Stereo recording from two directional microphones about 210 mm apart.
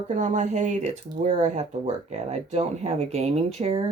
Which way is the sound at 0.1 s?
35° right (ahead or behind).